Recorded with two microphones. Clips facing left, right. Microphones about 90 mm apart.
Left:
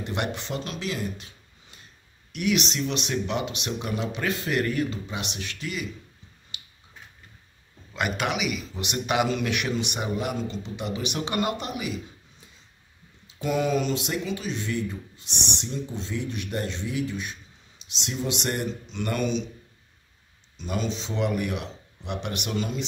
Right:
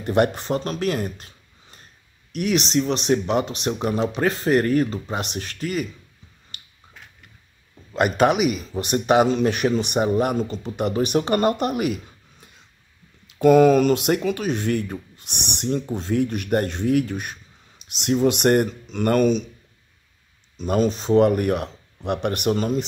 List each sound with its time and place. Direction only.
0.0 s speech: 45° right (ahead or behind)
6.5 s finger snapping: 45° right (ahead or behind)
7.9 s speech: 40° right (ahead or behind)
20.5 s speech: 45° right (ahead or behind)